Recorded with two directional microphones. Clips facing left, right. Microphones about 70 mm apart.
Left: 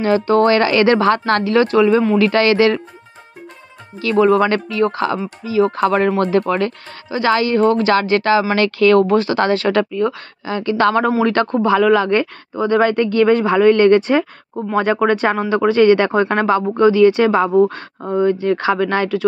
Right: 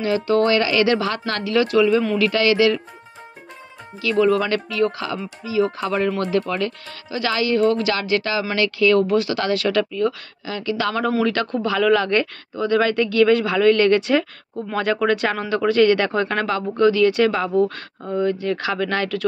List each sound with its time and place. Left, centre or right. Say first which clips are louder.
0.0 s speech: left 5 dB; left
4.0 s speech: left 5 dB; left
11.5 s speech: left 4 dB; left
12.6 s speech: left 4 dB; left